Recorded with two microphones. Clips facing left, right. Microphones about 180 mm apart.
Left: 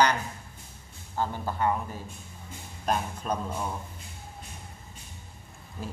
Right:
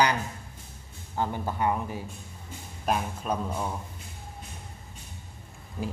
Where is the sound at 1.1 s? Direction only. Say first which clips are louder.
Right 1 dB; 15° right (ahead or behind).